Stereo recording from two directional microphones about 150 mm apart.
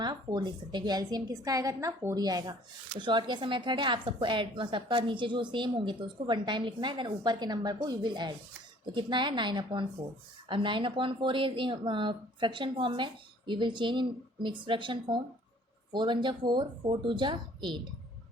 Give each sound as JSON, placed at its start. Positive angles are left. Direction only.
{"t": 0.0, "sound": "a woman's voice", "side_deg": -30}